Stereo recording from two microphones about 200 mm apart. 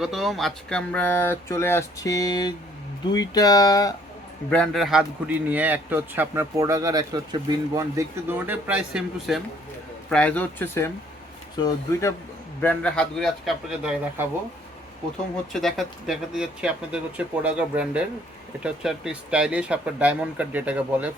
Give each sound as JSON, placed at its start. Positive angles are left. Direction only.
{"t": 0.0, "sound": "speech", "side_deg": 0}
{"t": 4.5, "sound": "speech", "side_deg": 5}
{"t": 15.5, "sound": "speech", "side_deg": 0}